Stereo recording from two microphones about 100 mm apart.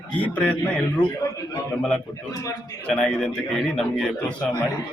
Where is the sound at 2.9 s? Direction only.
5° left (ahead or behind).